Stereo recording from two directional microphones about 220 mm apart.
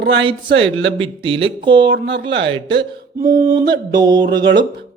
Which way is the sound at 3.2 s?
35° right (ahead or behind).